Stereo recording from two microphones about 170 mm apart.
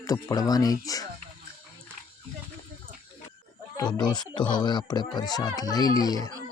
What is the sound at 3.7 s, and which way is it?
Speech, 25° left (ahead or behind).